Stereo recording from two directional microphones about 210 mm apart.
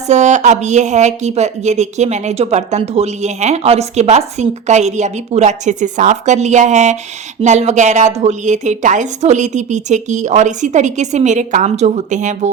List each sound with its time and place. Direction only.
0.1 s a woman's voice: 35° right (ahead or behind)